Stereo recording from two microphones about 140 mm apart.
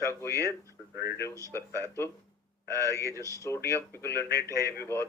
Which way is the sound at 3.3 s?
20° left (ahead or behind).